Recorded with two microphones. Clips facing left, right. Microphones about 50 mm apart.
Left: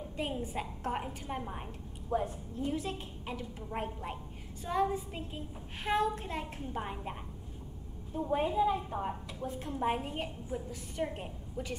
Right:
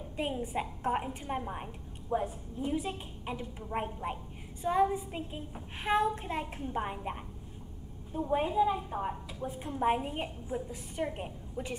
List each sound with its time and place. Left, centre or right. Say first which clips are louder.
0.4 s a woman's voice: right 3 dB; right
0.9 s a woman's voice: right 3 dB; centre
6.6 s a woman's voice: right 3 dB; centre
8.2 s a woman's voice: right 1 dB; centre